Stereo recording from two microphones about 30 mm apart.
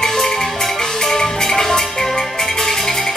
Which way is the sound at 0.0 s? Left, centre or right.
Centre.